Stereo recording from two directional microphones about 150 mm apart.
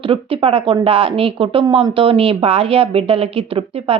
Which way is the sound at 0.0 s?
35° right (ahead or behind).